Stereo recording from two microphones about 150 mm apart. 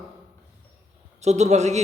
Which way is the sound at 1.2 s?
50° right (ahead or behind).